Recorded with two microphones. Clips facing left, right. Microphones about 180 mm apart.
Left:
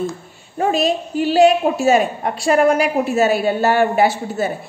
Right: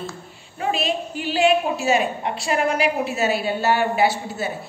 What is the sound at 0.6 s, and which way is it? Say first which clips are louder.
A woman's voice: left 6 dB; 45° left (ahead or behind).